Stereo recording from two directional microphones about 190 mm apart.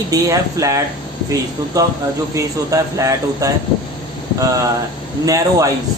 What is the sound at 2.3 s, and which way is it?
Speech, 15° right (ahead or behind).